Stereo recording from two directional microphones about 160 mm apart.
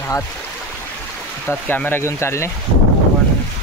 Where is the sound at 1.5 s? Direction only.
10° left (ahead or behind).